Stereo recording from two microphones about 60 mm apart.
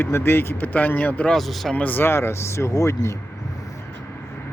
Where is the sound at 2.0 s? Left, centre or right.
Left.